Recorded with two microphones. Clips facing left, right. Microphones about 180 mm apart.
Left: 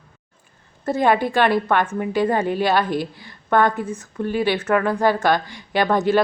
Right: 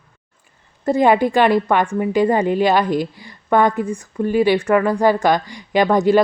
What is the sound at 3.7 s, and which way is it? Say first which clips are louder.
Speech: right 4 dB; 5° left (ahead or behind).